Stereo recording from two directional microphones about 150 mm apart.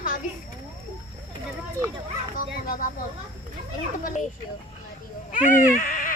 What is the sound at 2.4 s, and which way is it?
Dog, 65° left (ahead or behind).